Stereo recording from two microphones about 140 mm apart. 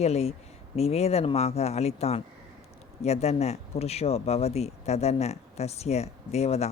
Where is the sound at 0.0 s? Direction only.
50° left (ahead or behind).